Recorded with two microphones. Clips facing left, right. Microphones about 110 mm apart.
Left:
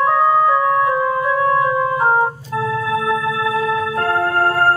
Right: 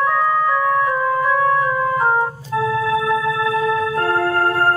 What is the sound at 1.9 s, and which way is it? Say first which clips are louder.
Organ: left 2 dB; 20° left (ahead or behind).